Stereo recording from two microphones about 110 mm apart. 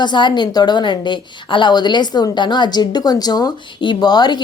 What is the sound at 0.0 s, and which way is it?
A woman's voice, 45° left (ahead or behind).